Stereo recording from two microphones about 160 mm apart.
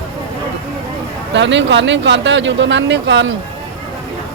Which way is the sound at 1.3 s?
90° right.